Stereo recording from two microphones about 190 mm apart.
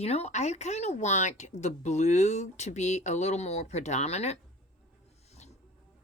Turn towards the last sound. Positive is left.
turn(degrees=35)  # may be behind; listen again after turning